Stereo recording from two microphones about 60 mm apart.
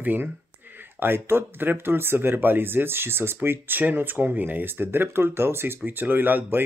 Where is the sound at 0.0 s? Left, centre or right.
Right.